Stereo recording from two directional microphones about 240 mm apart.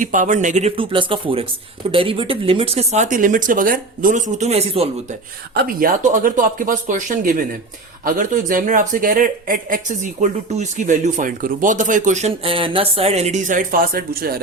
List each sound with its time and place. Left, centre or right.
0.0 s speech: right
5.5 s speech: right